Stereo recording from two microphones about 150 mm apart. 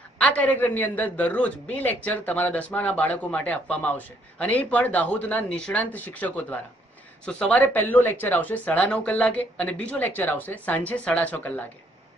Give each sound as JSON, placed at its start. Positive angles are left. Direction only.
{"t": 0.2, "sound": "speech", "side_deg": 10}